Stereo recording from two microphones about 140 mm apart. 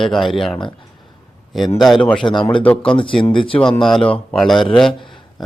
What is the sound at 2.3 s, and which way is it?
Speech, 35° left (ahead or behind).